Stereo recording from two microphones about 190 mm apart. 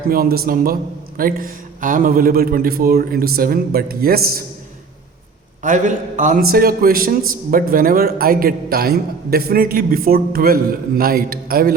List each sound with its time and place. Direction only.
0.1 s a man's voice: 50° right (ahead or behind)
5.6 s a man's voice: 40° right (ahead or behind)